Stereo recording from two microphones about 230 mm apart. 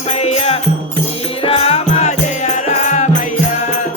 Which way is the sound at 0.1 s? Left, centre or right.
Left.